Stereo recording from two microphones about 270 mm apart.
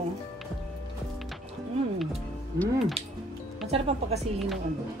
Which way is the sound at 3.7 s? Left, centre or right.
Right.